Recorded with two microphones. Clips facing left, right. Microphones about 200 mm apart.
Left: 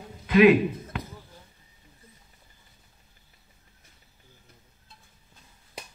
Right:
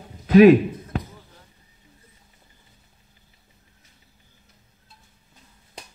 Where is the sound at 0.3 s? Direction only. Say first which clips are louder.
Right 6 dB; 45° right (ahead or behind).